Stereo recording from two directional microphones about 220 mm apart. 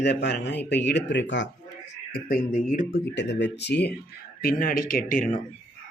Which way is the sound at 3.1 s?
50° left (ahead or behind).